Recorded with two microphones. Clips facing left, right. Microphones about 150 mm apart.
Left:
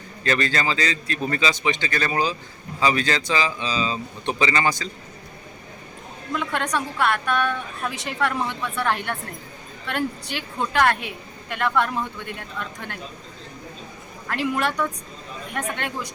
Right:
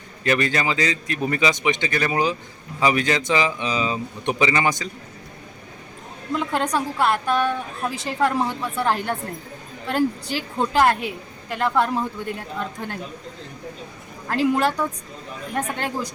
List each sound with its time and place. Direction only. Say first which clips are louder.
0.3 s a man's voice: right 2 dB; 15° right (ahead or behind)
6.3 s a woman's voice: right 3 dB; 30° right (ahead or behind)
14.3 s a woman's voice: right 4 dB; 30° right (ahead or behind)